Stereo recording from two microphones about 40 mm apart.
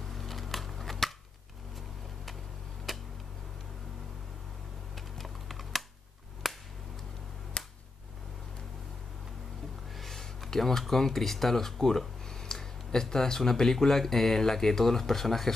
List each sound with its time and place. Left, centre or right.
0.0 s scissors: centre
2.9 s tick-tock: centre
4.9 s typing: centre
6.4 s a sound: centre
7.6 s a sound: left
9.9 s speech: centre